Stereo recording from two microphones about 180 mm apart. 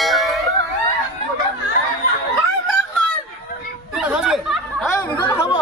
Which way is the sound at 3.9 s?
5° right (ahead or behind).